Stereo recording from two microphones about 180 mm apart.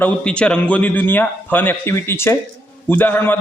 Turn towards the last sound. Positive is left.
turn(degrees=10)  # may be behind; listen again after turning